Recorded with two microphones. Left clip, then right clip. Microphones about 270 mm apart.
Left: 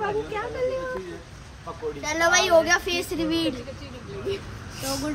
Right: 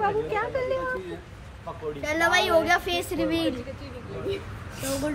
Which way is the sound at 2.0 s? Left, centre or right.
Centre.